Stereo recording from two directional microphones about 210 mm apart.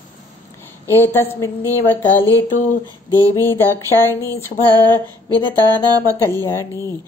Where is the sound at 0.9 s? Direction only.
10° left (ahead or behind).